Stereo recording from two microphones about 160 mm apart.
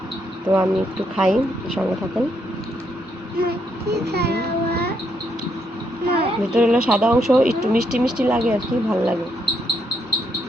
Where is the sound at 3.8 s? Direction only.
90° right.